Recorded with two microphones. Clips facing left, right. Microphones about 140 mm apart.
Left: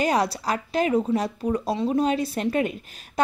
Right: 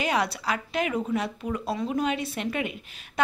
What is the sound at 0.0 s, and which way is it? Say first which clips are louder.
A woman's voice: left 4 dB; 40° left (ahead or behind).